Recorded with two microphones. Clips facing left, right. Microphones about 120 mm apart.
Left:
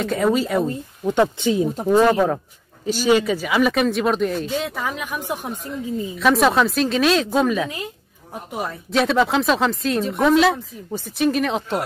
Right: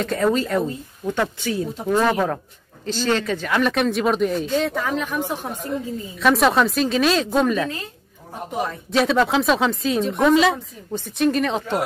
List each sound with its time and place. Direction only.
0.0 s speech: 5° left (ahead or behind)
1.0 s speech: 20° left (ahead or behind)
1.9 s speech: 10° left (ahead or behind)
8.6 s speech: centre (ahead or behind)